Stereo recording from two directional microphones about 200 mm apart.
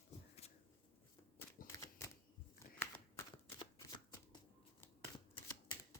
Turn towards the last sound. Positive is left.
turn(degrees=20)  # may be behind; listen again after turning